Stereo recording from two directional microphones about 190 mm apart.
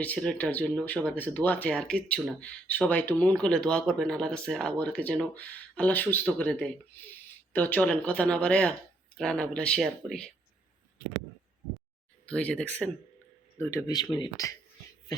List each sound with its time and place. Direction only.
0.0 s speech: 5° left (ahead or behind)
12.2 s speech: 5° left (ahead or behind)